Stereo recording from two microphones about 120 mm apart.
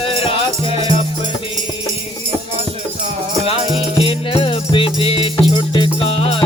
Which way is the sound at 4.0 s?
50° left (ahead or behind).